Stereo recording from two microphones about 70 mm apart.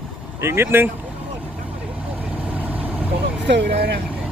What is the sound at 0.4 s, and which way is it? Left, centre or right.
Speech, right.